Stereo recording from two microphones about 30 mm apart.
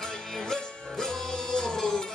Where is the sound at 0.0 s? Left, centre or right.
Centre.